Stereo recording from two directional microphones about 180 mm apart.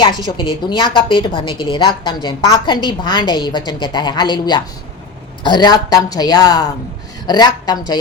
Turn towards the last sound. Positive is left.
turn(degrees=25)  # may be behind; listen again after turning